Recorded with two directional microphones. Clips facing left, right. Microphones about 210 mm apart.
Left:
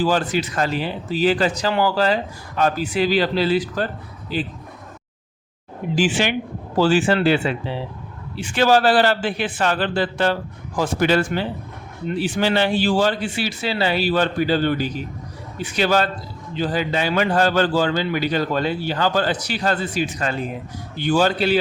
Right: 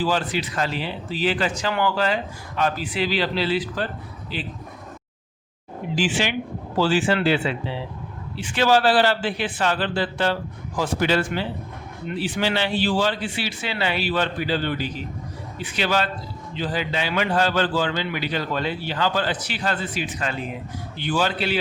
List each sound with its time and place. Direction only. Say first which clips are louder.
0.0 s a man's voice: left 4 dB; 45° left (ahead or behind)
6.0 s a man's voice: left 4 dB; 50° left (ahead or behind)